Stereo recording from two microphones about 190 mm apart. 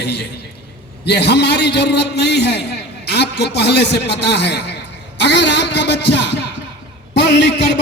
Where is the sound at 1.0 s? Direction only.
60° left (ahead or behind).